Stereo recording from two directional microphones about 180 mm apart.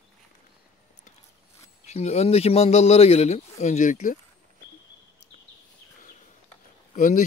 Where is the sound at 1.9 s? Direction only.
35° left (ahead or behind).